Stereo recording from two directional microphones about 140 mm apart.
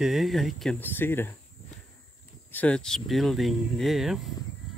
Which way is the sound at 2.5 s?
10° left (ahead or behind).